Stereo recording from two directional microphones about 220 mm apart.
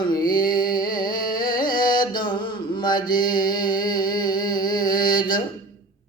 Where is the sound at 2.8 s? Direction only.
20° left (ahead or behind).